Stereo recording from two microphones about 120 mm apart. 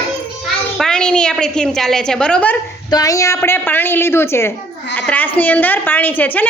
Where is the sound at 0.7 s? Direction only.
5° left (ahead or behind).